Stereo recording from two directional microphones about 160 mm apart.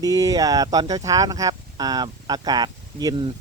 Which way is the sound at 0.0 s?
20° right (ahead or behind).